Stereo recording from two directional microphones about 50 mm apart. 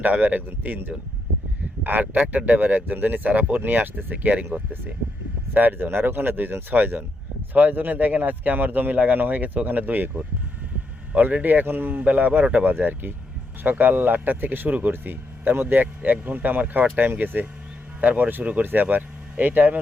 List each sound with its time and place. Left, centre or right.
0.0 s speech: right
1.8 s speech: right
5.5 s speech: right
11.1 s speech: right